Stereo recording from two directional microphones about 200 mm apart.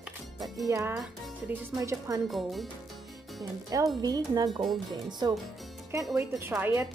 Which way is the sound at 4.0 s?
20° right (ahead or behind).